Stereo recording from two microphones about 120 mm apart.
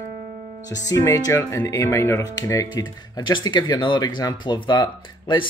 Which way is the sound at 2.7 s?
40° left (ahead or behind).